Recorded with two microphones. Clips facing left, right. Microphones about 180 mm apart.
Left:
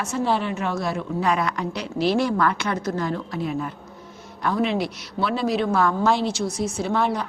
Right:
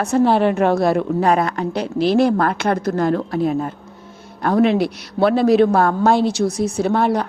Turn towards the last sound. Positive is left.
turn(degrees=-55)  # may be behind; listen again after turning